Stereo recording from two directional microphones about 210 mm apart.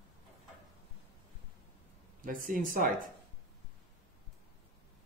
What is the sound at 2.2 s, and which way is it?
Speech, 40° right (ahead or behind).